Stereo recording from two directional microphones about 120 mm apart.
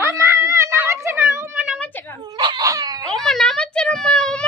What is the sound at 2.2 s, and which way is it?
Dog, 35° right (ahead or behind).